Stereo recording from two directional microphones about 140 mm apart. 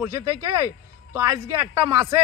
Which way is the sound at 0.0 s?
25° right (ahead or behind).